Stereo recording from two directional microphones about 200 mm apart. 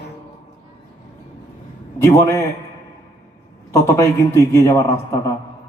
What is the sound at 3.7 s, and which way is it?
A man's voice, 15° left (ahead or behind).